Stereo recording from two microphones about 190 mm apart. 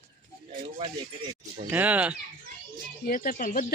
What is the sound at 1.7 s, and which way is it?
Speech, 10° right (ahead or behind).